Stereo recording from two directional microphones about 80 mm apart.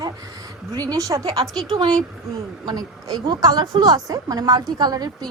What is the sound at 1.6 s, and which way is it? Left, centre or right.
Speech, right.